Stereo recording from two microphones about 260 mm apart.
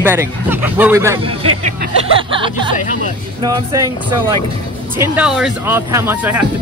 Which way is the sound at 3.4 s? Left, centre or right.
Centre.